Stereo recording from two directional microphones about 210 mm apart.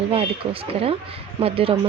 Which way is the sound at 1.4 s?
25° right (ahead or behind).